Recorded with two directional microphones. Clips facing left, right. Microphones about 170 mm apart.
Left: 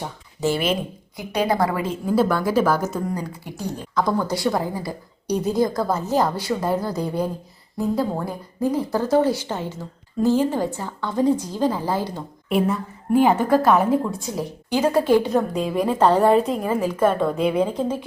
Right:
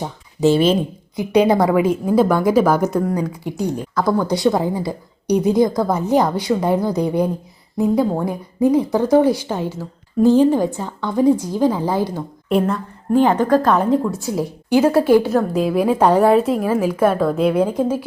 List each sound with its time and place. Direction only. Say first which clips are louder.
0.0 s a woman's voice: right 7 dB; 20° right (ahead or behind)
3.9 s a woman's voice: right 2 dB; 5° right (ahead or behind)
4.3 s speech: right 5 dB; 20° right (ahead or behind)
12.5 s a woman's voice: right 3 dB; centre (ahead or behind)
14.1 s speech: right 5 dB; 10° right (ahead or behind)